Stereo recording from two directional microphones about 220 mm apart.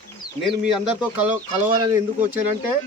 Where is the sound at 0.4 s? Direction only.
Centre (ahead or behind).